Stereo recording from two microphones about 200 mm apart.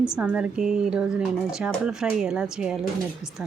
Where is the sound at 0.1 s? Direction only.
5° right (ahead or behind).